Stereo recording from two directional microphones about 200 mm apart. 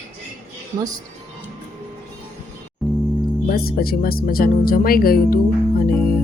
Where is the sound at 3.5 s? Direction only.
50° left (ahead or behind).